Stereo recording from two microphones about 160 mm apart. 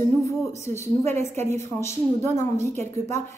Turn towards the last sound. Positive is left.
turn(degrees=15)  # may be behind; listen again after turning